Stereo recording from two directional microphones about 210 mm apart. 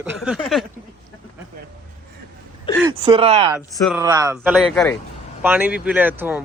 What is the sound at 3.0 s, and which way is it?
Speech, 25° right (ahead or behind).